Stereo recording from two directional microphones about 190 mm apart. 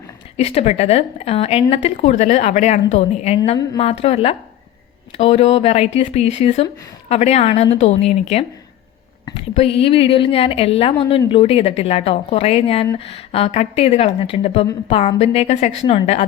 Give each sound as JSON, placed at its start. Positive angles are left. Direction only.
{"t": 0.3, "sound": "a woman's voice", "side_deg": 35}